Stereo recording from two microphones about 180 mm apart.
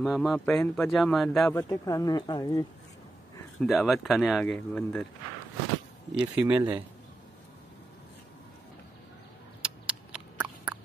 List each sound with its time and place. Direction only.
0.0 s a man's voice: centre (ahead or behind)
1.5 s speech: 20° left (ahead or behind)
3.6 s a man's voice: centre (ahead or behind)
6.1 s speech: 10° right (ahead or behind)
9.6 s a sound: 5° right (ahead or behind)